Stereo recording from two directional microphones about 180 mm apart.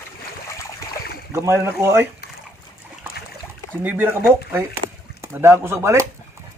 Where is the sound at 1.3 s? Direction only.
15° right (ahead or behind).